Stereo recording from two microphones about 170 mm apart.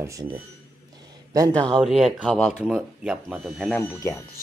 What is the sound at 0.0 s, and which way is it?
Speech, 20° right (ahead or behind).